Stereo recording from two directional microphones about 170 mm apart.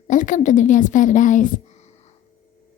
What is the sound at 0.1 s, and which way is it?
A woman's voice, 50° left (ahead or behind).